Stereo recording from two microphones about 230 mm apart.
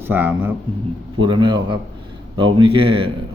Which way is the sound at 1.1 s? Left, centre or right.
Centre.